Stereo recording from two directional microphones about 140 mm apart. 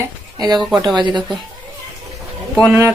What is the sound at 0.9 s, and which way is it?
Speech, 30° right (ahead or behind).